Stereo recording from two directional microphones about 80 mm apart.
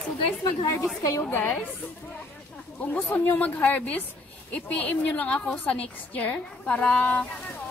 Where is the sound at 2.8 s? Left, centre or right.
Left.